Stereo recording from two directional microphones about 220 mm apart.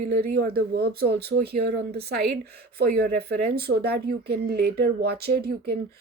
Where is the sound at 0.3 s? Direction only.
45° right (ahead or behind).